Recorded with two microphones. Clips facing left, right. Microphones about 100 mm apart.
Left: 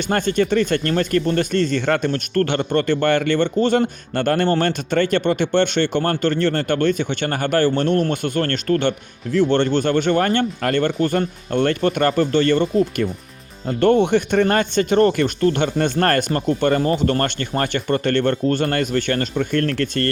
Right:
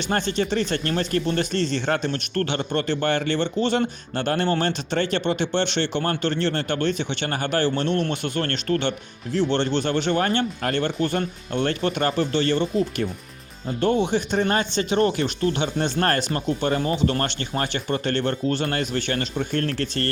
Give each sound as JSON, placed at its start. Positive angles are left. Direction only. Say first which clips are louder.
{"t": 0.1, "sound": "speech", "louder": "left 5 dB", "side_deg": 50}